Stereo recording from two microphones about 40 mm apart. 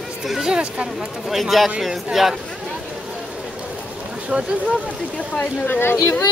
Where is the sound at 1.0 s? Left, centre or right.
Centre.